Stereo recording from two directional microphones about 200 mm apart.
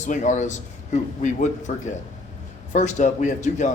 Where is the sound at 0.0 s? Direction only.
35° left (ahead or behind).